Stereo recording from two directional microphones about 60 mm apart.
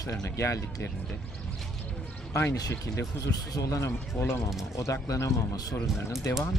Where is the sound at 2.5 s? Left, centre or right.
Left.